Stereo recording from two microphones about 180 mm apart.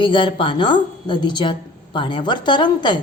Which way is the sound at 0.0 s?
25° left (ahead or behind).